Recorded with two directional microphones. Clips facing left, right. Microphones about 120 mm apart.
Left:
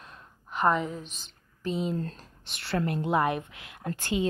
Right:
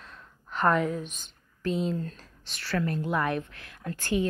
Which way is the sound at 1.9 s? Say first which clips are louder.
Left 1 dB; 40° left (ahead or behind).